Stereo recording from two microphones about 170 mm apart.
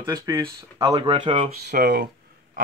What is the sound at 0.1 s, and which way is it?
Speech, 25° right (ahead or behind).